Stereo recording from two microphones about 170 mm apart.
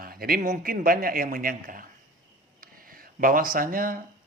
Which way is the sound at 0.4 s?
50° right (ahead or behind).